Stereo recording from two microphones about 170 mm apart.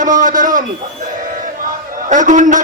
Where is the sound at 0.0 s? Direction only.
50° right (ahead or behind).